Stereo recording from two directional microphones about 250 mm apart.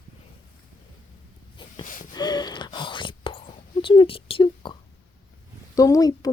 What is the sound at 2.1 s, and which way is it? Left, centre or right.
Whispering, centre.